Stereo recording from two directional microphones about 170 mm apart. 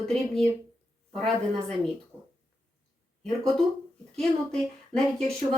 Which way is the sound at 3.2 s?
5° left (ahead or behind).